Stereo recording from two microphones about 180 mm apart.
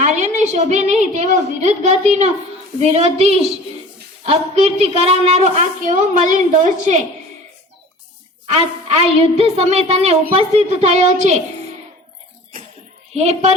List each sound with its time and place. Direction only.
0.0 s a woman's voice: 40° right (ahead or behind)
8.4 s a woman's voice: 35° right (ahead or behind)
13.1 s a woman's voice: 40° right (ahead or behind)